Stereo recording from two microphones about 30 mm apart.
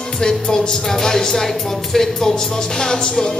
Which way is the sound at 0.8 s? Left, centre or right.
Centre.